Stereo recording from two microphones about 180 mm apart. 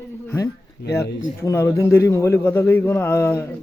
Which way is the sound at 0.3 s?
10° left (ahead or behind).